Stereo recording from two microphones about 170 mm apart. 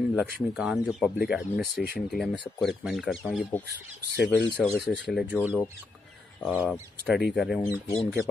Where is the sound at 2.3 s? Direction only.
30° left (ahead or behind).